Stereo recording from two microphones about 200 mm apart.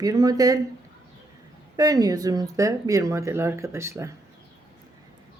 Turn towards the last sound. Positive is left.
turn(degrees=-15)  # may be behind; listen again after turning